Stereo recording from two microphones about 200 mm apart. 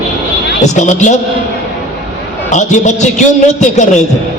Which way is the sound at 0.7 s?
35° left (ahead or behind).